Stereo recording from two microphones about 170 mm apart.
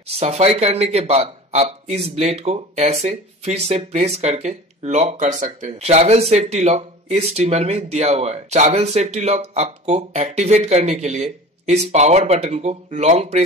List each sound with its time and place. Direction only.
0.0 s a man's voice: 35° right (ahead or behind)